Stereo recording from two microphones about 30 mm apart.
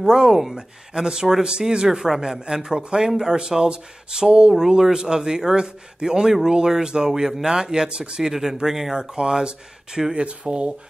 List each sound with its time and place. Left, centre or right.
0.0 s speech: right
1.9 s speech: centre
7.1 s speech: centre
8.2 s speech: centre
9.2 s speech: right